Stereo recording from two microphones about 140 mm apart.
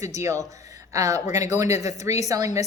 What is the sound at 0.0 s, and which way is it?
A woman's voice, 20° right (ahead or behind).